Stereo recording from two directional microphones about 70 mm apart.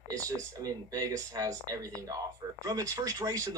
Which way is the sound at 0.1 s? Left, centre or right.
Right.